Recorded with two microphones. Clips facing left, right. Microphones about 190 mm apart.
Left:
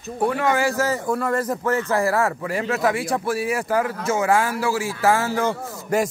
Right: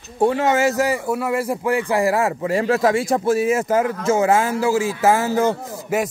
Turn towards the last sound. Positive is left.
turn(degrees=-5)  # may be behind; listen again after turning